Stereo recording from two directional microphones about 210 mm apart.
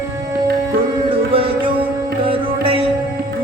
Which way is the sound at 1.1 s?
25° right (ahead or behind).